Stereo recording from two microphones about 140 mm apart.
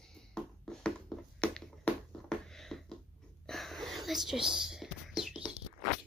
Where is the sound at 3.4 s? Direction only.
Centre (ahead or behind).